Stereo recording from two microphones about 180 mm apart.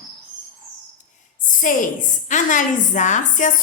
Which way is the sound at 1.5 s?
50° left (ahead or behind).